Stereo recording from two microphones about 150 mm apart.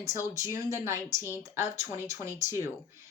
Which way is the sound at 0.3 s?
20° right (ahead or behind).